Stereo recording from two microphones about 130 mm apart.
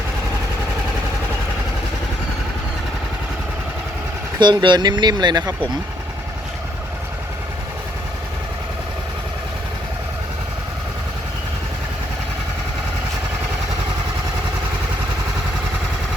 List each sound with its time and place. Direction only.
4.4 s speech: 35° right (ahead or behind)